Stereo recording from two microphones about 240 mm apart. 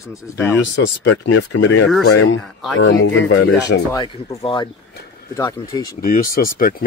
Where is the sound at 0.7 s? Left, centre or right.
Left.